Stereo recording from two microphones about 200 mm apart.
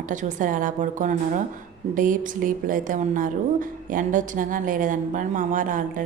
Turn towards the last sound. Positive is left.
turn(degrees=-40)  # may be behind; listen again after turning